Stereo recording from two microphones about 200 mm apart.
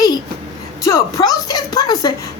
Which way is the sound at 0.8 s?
15° left (ahead or behind).